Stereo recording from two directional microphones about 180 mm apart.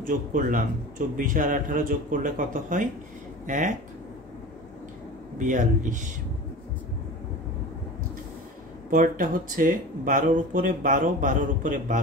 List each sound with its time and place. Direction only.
0.0 s speech: 50° right (ahead or behind)
5.4 s speech: 45° right (ahead or behind)
8.9 s speech: 45° right (ahead or behind)